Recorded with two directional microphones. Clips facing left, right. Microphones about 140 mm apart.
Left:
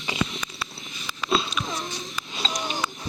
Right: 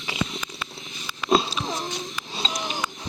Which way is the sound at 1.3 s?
40° right (ahead or behind).